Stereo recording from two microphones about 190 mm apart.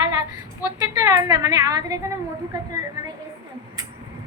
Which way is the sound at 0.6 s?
15° right (ahead or behind).